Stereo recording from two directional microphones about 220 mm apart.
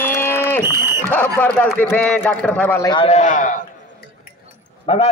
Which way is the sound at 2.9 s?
25° left (ahead or behind).